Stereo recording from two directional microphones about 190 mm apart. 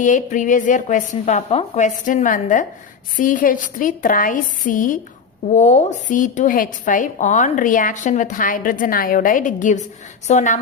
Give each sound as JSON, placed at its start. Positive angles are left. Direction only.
{"t": 0.0, "sound": "a woman's voice", "side_deg": 40}